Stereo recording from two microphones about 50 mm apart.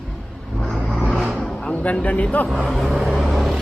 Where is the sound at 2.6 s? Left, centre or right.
Centre.